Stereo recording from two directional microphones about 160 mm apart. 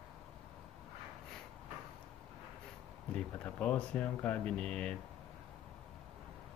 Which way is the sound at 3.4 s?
10° left (ahead or behind).